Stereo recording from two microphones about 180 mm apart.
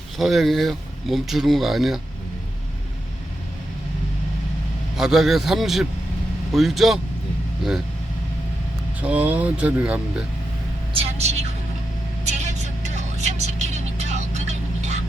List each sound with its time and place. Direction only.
0.2 s speech: centre (ahead or behind)
4.9 s speech: centre (ahead or behind)
9.0 s speech: 10° right (ahead or behind)
10.9 s vehicle: 35° right (ahead or behind)